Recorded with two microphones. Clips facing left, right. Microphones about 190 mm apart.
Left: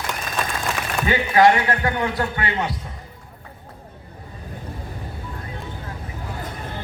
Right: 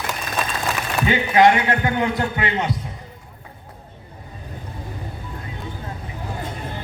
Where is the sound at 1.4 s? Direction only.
20° right (ahead or behind).